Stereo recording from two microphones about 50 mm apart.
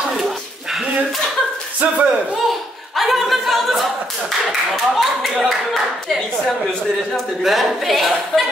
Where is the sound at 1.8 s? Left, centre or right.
Right.